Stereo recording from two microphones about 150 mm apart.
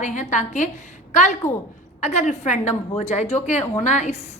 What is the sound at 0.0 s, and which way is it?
A woman's voice, 55° left (ahead or behind).